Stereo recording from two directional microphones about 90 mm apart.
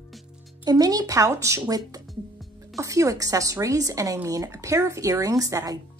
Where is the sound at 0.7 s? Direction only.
45° right (ahead or behind).